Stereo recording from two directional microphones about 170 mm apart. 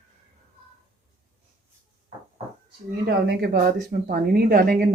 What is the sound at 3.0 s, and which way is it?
Speech, 65° right (ahead or behind).